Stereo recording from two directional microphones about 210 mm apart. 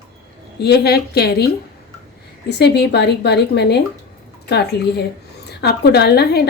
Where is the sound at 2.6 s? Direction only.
50° left (ahead or behind).